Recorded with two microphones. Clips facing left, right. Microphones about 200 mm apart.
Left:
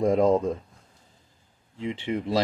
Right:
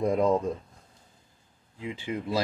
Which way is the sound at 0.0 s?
90° left.